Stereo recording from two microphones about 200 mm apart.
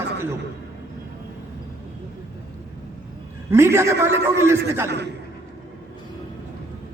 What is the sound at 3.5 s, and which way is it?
A man's voice, 15° right (ahead or behind).